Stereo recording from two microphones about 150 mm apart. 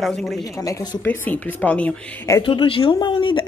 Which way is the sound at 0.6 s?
25° left (ahead or behind).